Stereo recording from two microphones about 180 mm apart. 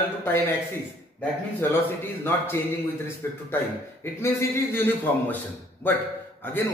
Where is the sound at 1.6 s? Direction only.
10° left (ahead or behind).